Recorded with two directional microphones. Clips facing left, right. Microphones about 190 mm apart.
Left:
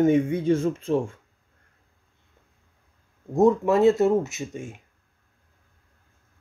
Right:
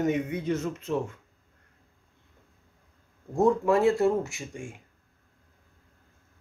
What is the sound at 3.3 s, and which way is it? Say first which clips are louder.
Speech: left 3 dB; 20° left (ahead or behind).